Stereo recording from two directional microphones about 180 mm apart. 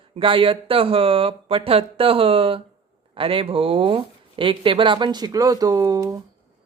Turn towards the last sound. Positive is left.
turn(degrees=-20)  # may be behind; listen again after turning